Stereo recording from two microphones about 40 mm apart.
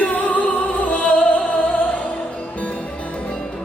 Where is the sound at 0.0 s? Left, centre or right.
Left.